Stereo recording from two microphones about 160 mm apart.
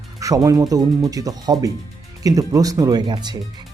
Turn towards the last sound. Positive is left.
turn(degrees=-25)  # may be behind; listen again after turning